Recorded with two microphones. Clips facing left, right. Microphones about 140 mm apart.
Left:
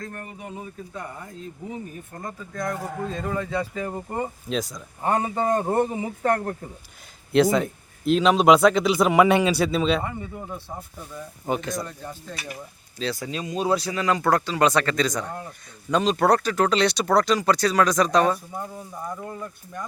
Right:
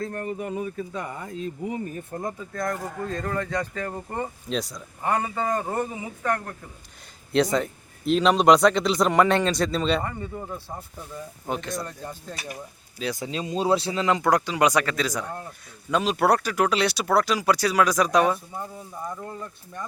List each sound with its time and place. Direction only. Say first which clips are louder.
0.1 s speech: right 8 dB; 35° right (ahead or behind)
0.4 s speech: right 6 dB; 90° right
2.5 s speech: left 3 dB; centre (ahead or behind)
4.5 s speech: left 1 dB; centre (ahead or behind)
5.0 s a man's voice: left 3 dB; 25° left (ahead or behind)
7.3 s speech: left 3 dB; centre (ahead or behind)
13.0 s speech: even; 15° right (ahead or behind)
19.0 s speech: left 1 dB; 5° left (ahead or behind)